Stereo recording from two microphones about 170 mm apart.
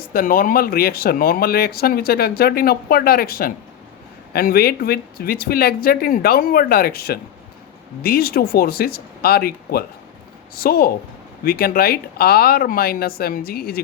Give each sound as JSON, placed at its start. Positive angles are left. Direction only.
{"t": 0.1, "sound": "speech", "side_deg": 60}